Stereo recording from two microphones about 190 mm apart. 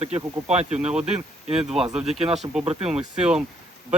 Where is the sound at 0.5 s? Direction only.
35° right (ahead or behind).